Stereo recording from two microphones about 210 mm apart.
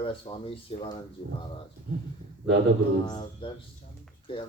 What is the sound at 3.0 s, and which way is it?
Speech, 20° left (ahead or behind).